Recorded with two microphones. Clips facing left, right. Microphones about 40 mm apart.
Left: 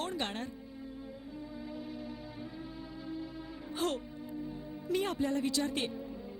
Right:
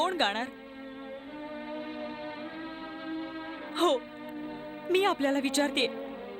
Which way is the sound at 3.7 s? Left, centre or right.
Right.